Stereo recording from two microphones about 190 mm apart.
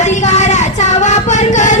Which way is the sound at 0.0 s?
40° left (ahead or behind).